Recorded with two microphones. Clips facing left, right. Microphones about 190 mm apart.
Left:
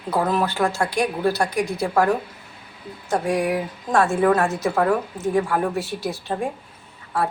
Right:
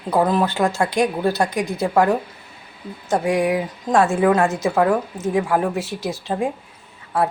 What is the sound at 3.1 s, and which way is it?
Speech, 20° right (ahead or behind).